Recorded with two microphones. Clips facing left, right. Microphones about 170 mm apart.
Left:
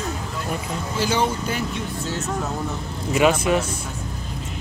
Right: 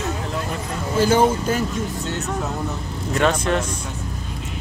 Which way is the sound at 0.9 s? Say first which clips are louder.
Right 6 dB; 50° right (ahead or behind).